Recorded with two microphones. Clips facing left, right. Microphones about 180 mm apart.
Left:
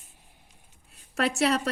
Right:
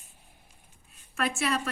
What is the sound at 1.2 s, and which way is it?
Speech, 75° left (ahead or behind).